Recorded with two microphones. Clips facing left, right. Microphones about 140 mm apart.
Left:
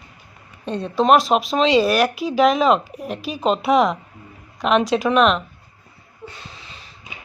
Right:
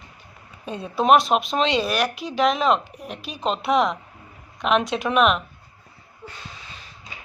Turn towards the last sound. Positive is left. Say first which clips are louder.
# left 3 dB
turn(degrees=-5)  # may be behind; listen again after turning